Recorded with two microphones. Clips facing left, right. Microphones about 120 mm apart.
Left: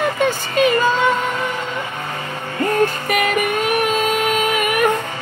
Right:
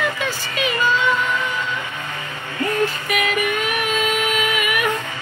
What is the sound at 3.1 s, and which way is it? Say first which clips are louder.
Music: left 3 dB; 45° left (ahead or behind).